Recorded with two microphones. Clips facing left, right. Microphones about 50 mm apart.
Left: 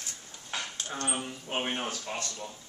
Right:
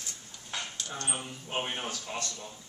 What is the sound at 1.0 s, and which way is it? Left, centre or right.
Speech, centre.